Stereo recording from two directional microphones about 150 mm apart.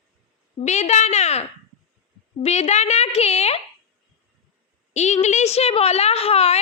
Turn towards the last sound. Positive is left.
turn(degrees=40)  # may be behind; listen again after turning